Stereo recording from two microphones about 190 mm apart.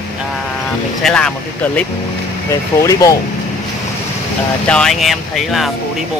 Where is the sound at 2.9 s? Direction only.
20° left (ahead or behind).